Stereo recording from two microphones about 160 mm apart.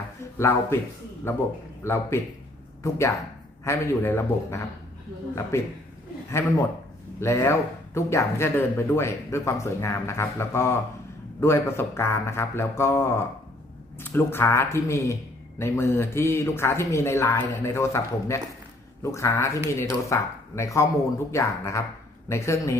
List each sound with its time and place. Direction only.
0.3 s speech: 15° left (ahead or behind)
7.2 s speech: 15° left (ahead or behind)